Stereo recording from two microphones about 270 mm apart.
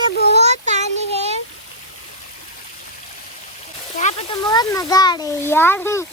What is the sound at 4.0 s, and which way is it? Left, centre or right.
A child's voice, left.